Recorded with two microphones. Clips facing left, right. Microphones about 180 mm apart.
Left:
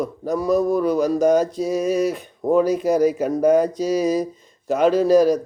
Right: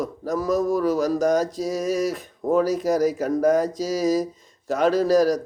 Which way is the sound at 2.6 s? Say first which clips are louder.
Left 3 dB; 65° left (ahead or behind).